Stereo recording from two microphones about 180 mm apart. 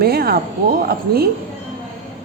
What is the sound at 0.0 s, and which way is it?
A woman's voice, 60° right (ahead or behind).